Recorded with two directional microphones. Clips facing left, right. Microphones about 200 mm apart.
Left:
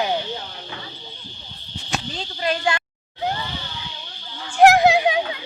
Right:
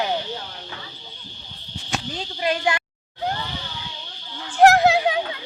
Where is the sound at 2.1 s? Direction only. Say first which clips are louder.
Right 1 dB; 15° right (ahead or behind).